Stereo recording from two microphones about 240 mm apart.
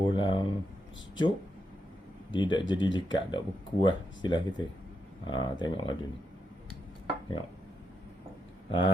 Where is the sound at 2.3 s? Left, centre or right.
Centre.